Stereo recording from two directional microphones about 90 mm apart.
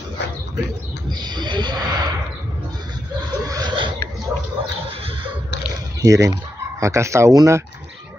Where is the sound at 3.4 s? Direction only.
45° right (ahead or behind).